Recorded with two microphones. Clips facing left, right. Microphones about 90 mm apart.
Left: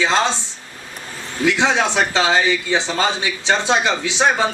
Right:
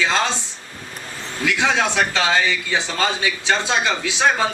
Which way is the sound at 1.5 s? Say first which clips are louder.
Left 2 dB; 25° left (ahead or behind).